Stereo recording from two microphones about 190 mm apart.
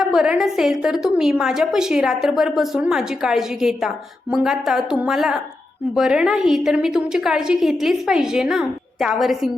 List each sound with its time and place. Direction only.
0.0 s a woman's voice: centre (ahead or behind)